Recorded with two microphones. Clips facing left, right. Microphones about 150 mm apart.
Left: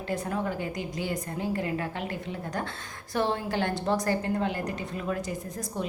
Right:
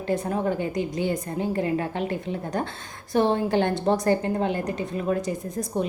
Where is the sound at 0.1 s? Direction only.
25° right (ahead or behind).